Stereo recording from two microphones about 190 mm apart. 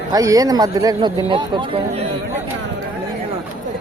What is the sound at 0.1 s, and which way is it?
Speech, 20° right (ahead or behind).